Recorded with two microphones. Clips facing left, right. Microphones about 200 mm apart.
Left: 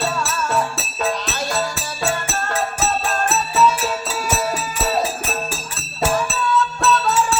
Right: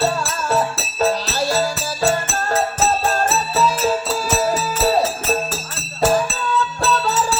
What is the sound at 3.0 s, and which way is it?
Music, 35° right (ahead or behind).